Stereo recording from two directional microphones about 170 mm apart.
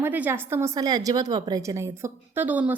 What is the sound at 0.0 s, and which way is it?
A woman's voice, 10° right (ahead or behind).